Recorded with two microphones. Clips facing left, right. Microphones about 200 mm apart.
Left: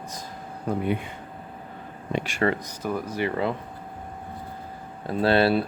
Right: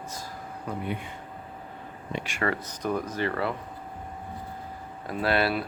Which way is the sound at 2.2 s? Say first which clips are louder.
Left 4 dB; 30° left (ahead or behind).